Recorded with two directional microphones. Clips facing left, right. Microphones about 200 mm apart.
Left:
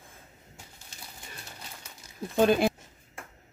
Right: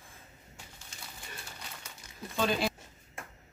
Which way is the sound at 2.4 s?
55° left (ahead or behind).